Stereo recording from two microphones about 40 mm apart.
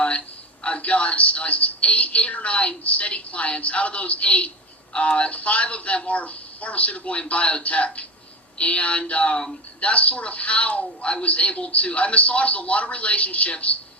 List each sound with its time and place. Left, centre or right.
0.6 s a man's voice: left